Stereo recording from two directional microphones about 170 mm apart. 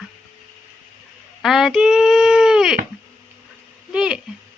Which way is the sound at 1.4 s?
Centre (ahead or behind).